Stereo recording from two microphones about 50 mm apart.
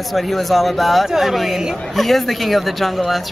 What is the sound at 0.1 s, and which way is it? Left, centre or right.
Speech, centre.